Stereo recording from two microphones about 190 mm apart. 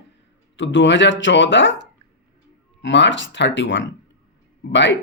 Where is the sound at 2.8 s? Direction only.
75° left (ahead or behind).